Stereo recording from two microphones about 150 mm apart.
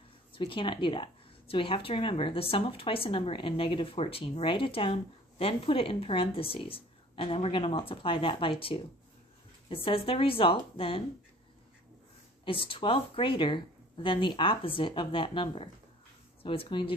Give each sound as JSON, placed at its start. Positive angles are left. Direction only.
{"t": 0.3, "sound": "a woman's voice", "side_deg": 35}
{"t": 12.4, "sound": "a woman's voice", "side_deg": 35}